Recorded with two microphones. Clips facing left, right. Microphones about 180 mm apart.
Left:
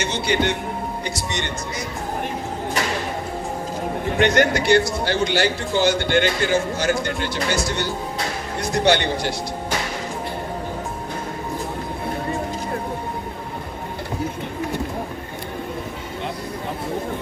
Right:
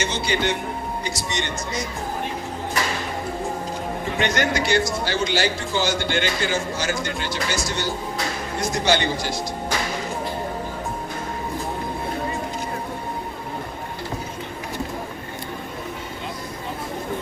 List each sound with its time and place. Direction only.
0.0 s a man's voice: 60° left (ahead or behind)
4.2 s a man's voice: 60° left (ahead or behind)